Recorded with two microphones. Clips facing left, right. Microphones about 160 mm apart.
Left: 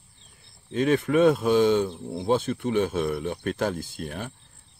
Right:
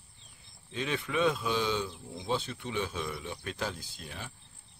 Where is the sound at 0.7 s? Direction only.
45° left (ahead or behind).